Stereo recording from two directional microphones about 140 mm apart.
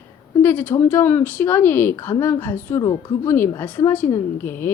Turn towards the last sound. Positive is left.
turn(degrees=15)  # may be behind; listen again after turning